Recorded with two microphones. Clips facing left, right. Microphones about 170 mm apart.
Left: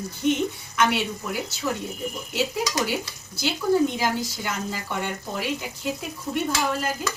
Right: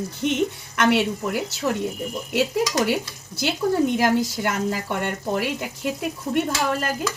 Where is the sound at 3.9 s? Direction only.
60° right (ahead or behind).